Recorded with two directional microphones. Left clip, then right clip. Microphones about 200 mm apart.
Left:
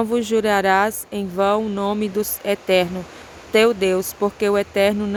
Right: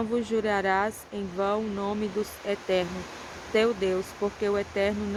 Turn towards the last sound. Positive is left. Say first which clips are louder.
# left 9 dB
turn(degrees=45)  # may be behind; listen again after turning